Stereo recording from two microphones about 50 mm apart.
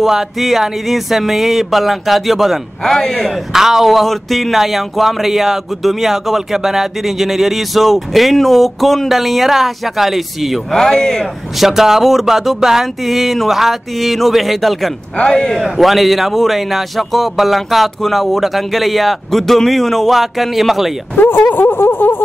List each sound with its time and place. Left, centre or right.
0.0 s speech: centre
2.8 s a man's voice: centre
3.5 s speech: centre
10.7 s a man's voice: centre
11.5 s speech: centre
15.1 s a man's voice: centre
15.6 s speech: centre
21.2 s a sound: left